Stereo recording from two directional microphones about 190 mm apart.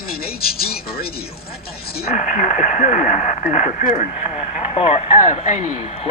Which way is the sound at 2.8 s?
40° left (ahead or behind).